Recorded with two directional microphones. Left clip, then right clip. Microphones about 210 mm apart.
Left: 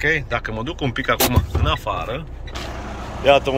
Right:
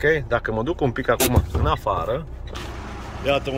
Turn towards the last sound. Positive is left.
turn(degrees=-5)  # may be behind; listen again after turning